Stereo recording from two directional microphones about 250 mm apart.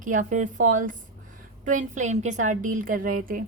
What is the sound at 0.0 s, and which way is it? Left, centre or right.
A woman's voice, right.